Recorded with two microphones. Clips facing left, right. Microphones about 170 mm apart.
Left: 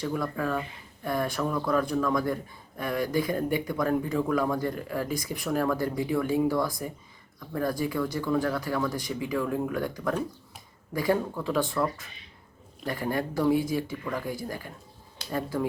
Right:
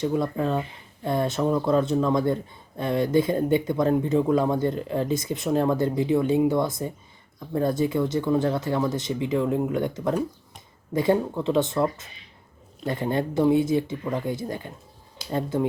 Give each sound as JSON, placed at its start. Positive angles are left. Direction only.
{"t": 0.0, "sound": "speech", "side_deg": -25}